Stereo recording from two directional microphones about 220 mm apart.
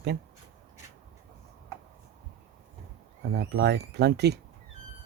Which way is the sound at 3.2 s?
50° right (ahead or behind).